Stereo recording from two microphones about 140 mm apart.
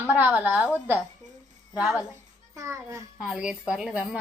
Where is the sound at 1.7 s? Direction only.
5° right (ahead or behind).